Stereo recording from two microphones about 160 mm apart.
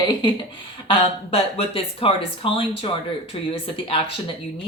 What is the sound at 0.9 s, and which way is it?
A woman's voice, 35° left (ahead or behind).